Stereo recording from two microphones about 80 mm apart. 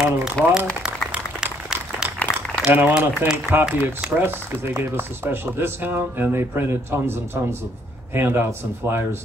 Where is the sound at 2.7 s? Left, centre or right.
Right.